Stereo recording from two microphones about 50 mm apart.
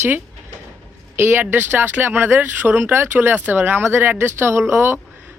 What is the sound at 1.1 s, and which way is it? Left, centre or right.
A man's voice, right.